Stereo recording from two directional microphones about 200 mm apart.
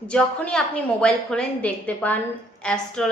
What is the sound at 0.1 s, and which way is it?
A woman's voice, 5° left (ahead or behind).